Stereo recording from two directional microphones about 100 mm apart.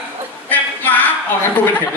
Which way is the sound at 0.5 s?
15° left (ahead or behind).